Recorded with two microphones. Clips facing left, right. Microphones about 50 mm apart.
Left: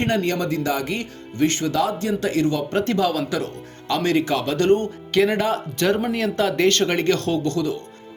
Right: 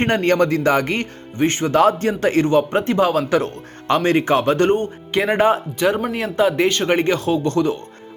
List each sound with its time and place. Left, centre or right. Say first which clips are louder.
0.0 s a man's voice: right 5 dB; right
1.4 s speech: right 4 dB; right
5.7 s speech: right 2 dB; centre
7.4 s speech: right 4 dB; right